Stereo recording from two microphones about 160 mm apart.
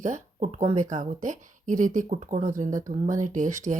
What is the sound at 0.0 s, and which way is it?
Speech, 50° right (ahead or behind).